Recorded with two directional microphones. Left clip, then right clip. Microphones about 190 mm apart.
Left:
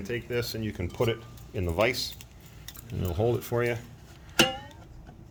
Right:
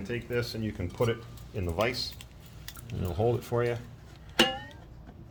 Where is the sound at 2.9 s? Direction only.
30° left (ahead or behind).